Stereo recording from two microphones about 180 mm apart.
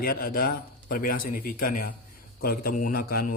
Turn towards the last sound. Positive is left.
turn(degrees=55)  # may be behind; listen again after turning